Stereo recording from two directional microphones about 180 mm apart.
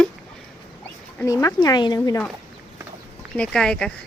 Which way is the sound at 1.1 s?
20° left (ahead or behind).